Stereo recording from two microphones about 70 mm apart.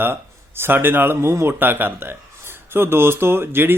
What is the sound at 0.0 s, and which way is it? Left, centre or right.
Speech, right.